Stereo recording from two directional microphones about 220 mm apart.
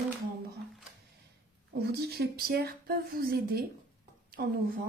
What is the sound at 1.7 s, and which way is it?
Speech, 45° right (ahead or behind).